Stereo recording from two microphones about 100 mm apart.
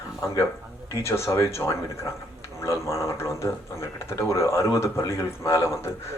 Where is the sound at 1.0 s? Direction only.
30° left (ahead or behind).